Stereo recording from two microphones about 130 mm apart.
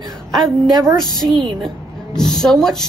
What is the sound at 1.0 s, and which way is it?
Speech, 30° left (ahead or behind).